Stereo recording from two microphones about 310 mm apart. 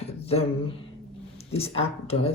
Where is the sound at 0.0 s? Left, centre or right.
Centre.